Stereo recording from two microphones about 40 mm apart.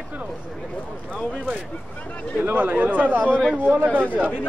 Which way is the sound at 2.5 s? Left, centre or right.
Right.